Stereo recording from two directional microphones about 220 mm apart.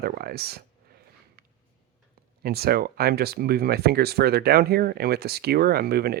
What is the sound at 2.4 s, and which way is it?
Speech, 45° right (ahead or behind).